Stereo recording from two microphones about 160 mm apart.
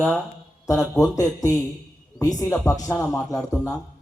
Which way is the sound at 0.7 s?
20° left (ahead or behind).